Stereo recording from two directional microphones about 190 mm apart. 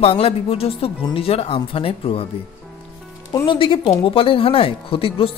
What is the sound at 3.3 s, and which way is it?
Speech, 25° left (ahead or behind).